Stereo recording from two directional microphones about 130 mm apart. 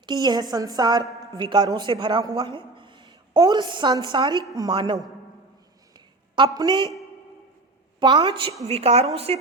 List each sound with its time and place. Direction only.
0.0 s a woman's voice: 35° right (ahead or behind)
6.3 s a woman's voice: 35° right (ahead or behind)
7.9 s a woman's voice: 35° right (ahead or behind)
8.6 s a woman's voice: 55° right (ahead or behind)